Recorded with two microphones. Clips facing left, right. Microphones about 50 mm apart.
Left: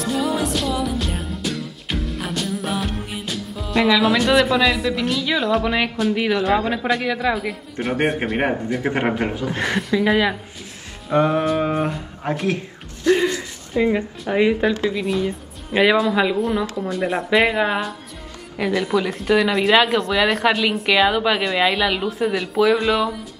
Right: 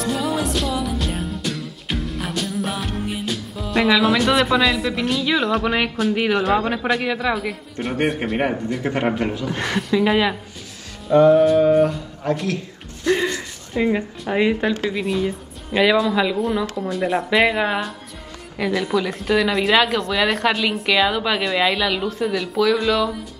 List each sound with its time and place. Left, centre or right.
0.0 s music: centre
6.2 s a woman's voice: centre
8.4 s a man's voice: centre
9.6 s a woman's voice: centre
11.1 s music: centre
11.3 s a woman's voice: centre
11.6 s a man's voice: left
11.9 s speech: centre
13.1 s a sound: centre
13.7 s a woman's voice: centre
15.2 s a woman's voice: centre
16.3 s a woman's voice: centre